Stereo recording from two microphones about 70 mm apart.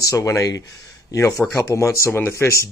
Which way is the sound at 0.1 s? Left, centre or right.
Left.